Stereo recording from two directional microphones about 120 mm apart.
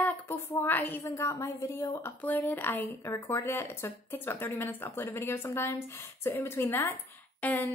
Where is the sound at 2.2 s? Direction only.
15° left (ahead or behind).